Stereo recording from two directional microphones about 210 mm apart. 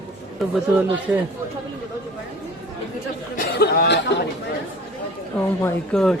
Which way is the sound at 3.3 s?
45° left (ahead or behind).